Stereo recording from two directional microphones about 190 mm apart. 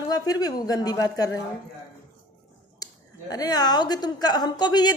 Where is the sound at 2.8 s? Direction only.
20° left (ahead or behind).